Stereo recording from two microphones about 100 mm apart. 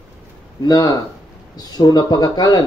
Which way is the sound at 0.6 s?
40° left (ahead or behind).